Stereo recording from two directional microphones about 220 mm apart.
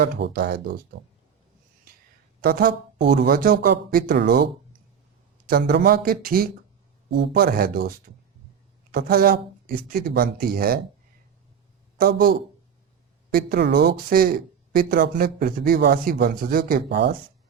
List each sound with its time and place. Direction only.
0.0 s speech: 45° right (ahead or behind)
2.4 s speech: 40° right (ahead or behind)
5.5 s speech: 45° right (ahead or behind)
11.9 s speech: 40° right (ahead or behind)
13.3 s speech: 45° right (ahead or behind)